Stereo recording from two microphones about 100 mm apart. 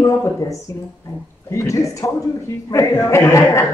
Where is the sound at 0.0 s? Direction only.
30° left (ahead or behind).